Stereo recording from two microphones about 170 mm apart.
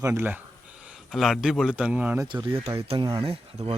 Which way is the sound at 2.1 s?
25° right (ahead or behind).